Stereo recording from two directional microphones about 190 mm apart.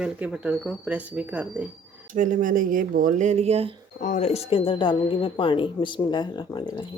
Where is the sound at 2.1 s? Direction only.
45° right (ahead or behind).